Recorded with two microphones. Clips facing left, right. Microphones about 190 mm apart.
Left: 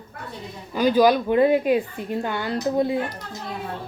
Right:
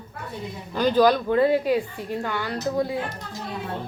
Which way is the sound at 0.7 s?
10° left (ahead or behind).